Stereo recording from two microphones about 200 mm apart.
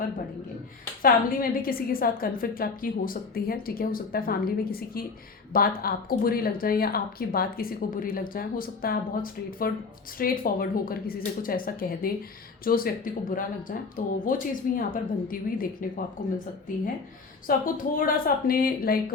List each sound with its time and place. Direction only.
1.0 s speech: 45° left (ahead or behind)
17.4 s speech: 45° left (ahead or behind)